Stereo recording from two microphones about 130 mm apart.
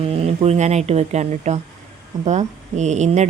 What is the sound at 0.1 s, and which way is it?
A woman's voice, 55° right (ahead or behind).